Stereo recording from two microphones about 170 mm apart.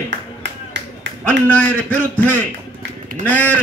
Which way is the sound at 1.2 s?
10° left (ahead or behind).